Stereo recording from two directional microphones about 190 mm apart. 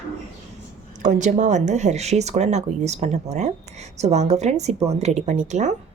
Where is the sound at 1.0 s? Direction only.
40° right (ahead or behind).